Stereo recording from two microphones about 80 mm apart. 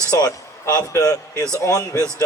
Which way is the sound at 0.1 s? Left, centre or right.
Left.